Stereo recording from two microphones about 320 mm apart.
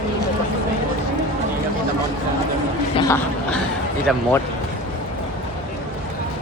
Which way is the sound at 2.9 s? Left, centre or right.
Centre.